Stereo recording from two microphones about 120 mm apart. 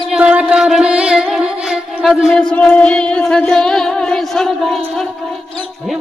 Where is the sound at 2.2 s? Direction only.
5° left (ahead or behind).